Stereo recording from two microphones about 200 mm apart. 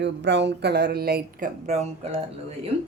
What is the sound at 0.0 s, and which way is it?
Speech, 60° right (ahead or behind).